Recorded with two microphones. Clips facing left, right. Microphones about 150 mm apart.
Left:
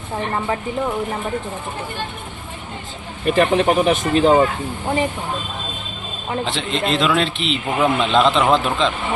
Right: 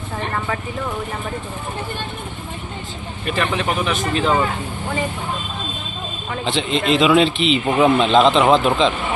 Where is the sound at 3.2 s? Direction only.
45° left (ahead or behind).